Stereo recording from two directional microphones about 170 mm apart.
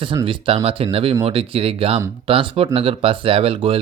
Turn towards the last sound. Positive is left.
turn(degrees=-35)  # may be behind; listen again after turning